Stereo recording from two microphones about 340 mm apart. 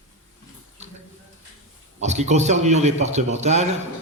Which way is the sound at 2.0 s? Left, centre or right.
Centre.